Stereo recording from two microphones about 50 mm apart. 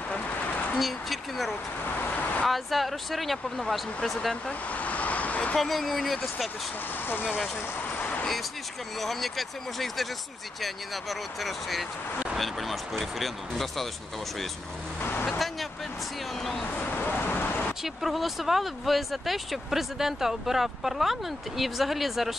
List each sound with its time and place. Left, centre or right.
0.1 s a sound: left
0.7 s a sound: centre
2.4 s speech: centre
4.5 s vehicle: left
5.6 s speech: centre
7.8 s vehicle: left
9.0 s speech: centre
15.0 s vehicle: left
15.2 s vehicle: centre
16.7 s vehicle: left
17.8 s speech: centre